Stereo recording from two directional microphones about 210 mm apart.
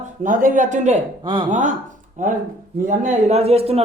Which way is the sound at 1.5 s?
35° right (ahead or behind).